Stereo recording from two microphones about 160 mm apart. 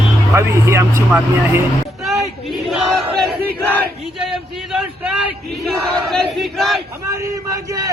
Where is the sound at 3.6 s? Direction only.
10° left (ahead or behind).